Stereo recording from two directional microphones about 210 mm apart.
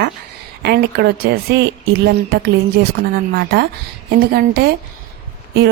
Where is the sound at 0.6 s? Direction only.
50° right (ahead or behind).